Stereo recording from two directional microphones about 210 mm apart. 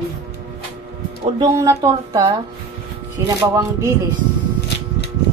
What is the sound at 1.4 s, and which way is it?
Speech, 15° right (ahead or behind).